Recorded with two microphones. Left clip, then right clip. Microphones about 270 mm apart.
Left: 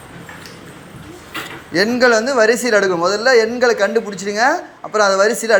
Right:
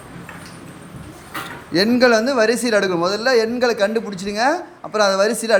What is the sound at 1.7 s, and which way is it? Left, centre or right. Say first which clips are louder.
A woman's voice: left 1 dB; centre.